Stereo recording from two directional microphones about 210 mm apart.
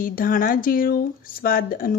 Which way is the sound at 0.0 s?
40° left (ahead or behind).